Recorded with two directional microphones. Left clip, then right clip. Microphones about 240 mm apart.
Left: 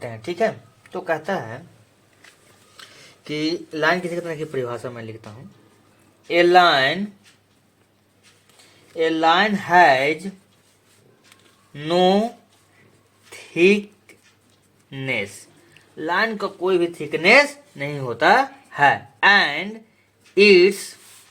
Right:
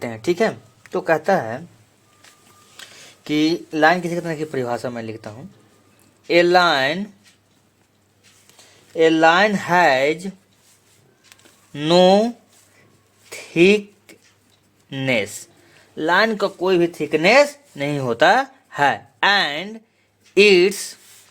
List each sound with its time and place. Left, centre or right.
0.0 s speech: right
2.7 s speech: right
9.0 s speech: right
11.7 s speech: right
13.3 s a sound: right
14.8 s speech: right